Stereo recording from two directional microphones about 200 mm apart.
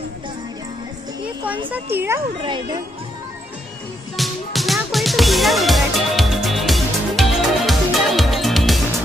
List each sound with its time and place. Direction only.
2.0 s speech: 15° right (ahead or behind)
2.4 s speech: 25° right (ahead or behind)
4.2 s music: centre (ahead or behind)